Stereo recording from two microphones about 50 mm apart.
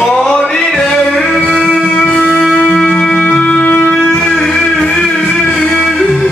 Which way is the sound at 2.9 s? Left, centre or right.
Centre.